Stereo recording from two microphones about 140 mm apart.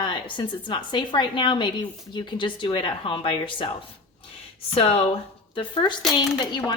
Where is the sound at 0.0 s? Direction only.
35° left (ahead or behind).